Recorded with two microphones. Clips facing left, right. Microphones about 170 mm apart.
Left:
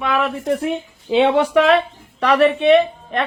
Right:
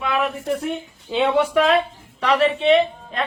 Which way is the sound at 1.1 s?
90° left.